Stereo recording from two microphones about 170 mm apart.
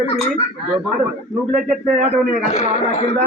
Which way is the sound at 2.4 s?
45° left (ahead or behind).